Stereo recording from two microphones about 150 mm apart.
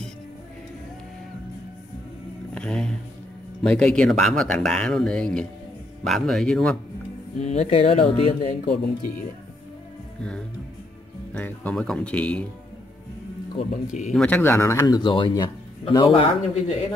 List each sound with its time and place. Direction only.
2.5 s speech: 5° left (ahead or behind)
7.3 s speech: 45° left (ahead or behind)
8.5 s speech: 70° left (ahead or behind)
11.3 s speech: 10° left (ahead or behind)
14.1 s speech: 10° left (ahead or behind)
15.0 s speech: 35° left (ahead or behind)